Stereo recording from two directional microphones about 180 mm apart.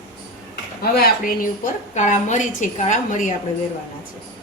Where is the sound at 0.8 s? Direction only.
60° left (ahead or behind).